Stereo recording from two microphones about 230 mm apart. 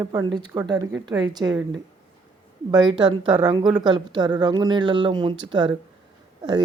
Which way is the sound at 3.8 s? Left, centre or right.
Centre.